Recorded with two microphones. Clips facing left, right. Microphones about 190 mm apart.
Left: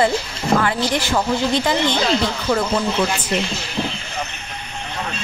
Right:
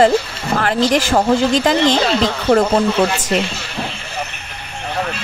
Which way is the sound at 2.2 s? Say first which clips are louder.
Right 6 dB; 65° right (ahead or behind).